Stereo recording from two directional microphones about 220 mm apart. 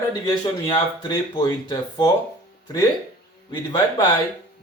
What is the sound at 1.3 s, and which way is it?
Speech, 20° left (ahead or behind).